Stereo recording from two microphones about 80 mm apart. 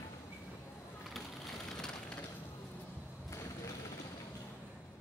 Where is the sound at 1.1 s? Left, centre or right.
Centre.